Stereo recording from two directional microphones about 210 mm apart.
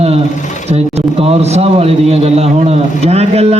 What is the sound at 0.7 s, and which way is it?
A man's voice, 30° right (ahead or behind).